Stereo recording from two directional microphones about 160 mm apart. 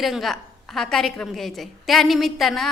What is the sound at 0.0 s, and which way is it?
A woman's voice, centre (ahead or behind).